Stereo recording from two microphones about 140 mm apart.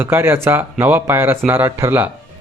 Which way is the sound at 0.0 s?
15° right (ahead or behind).